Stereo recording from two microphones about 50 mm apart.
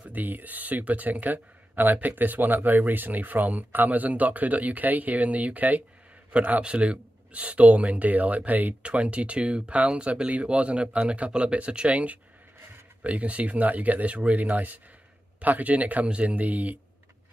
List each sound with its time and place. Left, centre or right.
0.1 s speech: right